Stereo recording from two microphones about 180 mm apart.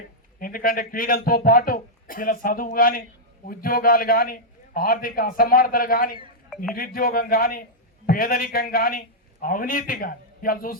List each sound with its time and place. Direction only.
0.3 s a man's voice: 50° left (ahead or behind)